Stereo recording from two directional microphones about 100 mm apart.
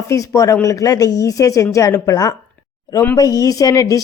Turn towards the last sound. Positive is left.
turn(degrees=35)  # may be behind; listen again after turning